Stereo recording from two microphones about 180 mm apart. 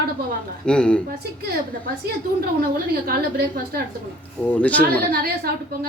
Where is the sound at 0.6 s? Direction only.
5° left (ahead or behind).